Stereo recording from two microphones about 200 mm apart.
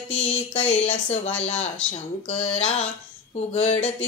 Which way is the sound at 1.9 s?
30° left (ahead or behind).